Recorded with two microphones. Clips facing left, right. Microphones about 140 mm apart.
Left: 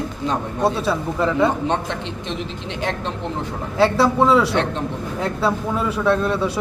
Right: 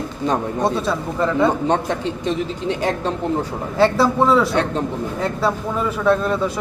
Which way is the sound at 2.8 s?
45° right (ahead or behind).